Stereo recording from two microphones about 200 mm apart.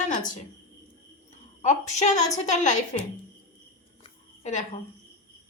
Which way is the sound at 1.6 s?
35° left (ahead or behind).